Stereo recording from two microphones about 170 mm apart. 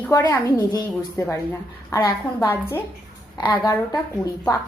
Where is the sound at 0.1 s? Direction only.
15° left (ahead or behind).